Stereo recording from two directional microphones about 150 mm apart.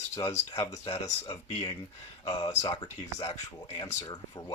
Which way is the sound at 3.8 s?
25° left (ahead or behind).